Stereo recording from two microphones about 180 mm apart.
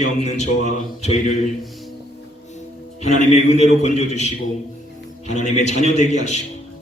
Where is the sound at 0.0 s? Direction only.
40° left (ahead or behind).